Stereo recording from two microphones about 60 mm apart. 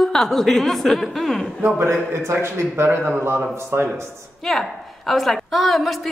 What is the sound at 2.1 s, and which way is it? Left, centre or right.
A man's voice, right.